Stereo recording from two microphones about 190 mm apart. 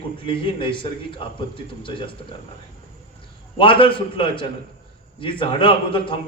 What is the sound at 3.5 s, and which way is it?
A man's voice, 25° left (ahead or behind).